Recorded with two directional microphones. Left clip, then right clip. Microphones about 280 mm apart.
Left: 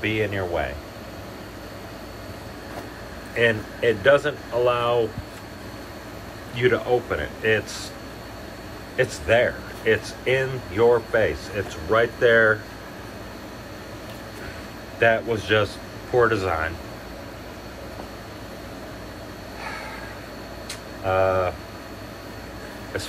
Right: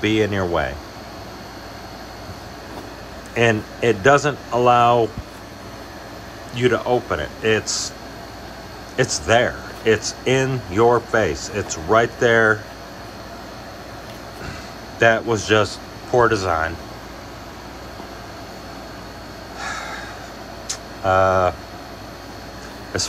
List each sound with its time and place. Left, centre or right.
0.0 s speech: centre
3.3 s speech: centre
6.5 s speech: centre
8.9 s speech: centre
15.0 s speech: centre
20.6 s a sound: centre